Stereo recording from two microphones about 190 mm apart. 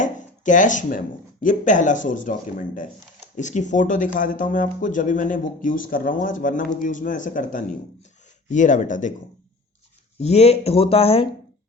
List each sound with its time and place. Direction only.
0.0 s speech: 40° left (ahead or behind)
10.2 s speech: 35° left (ahead or behind)